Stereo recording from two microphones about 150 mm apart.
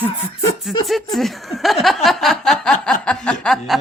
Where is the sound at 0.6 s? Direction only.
Centre (ahead or behind).